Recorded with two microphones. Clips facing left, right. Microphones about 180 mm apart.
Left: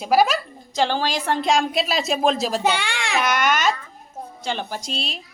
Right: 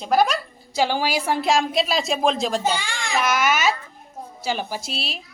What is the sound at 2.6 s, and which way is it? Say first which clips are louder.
Speech: left 2 dB; 65° left (ahead or behind).